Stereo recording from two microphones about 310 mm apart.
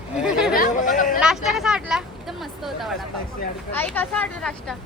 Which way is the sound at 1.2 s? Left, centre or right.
Centre.